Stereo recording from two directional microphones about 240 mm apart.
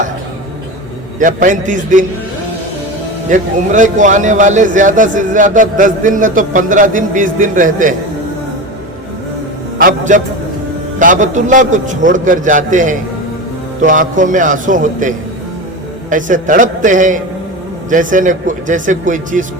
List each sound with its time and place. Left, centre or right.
1.2 s a man's voice: right
3.2 s a man's voice: right
9.7 s a man's voice: right